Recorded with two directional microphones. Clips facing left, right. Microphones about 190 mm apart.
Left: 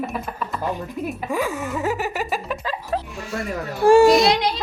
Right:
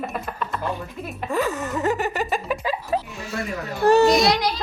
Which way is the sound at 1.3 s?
10° left (ahead or behind).